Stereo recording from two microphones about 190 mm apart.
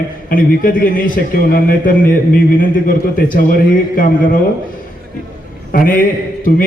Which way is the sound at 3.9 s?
45° left (ahead or behind).